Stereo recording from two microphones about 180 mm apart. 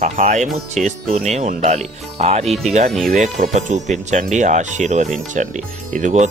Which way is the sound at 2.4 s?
Centre (ahead or behind).